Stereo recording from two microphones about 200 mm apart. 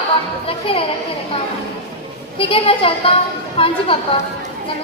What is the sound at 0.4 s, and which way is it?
Speech, 25° left (ahead or behind).